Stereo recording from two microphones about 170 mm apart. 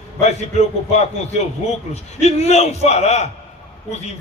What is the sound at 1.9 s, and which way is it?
A man's voice, 40° left (ahead or behind).